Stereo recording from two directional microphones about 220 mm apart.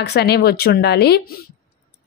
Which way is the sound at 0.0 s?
50° left (ahead or behind).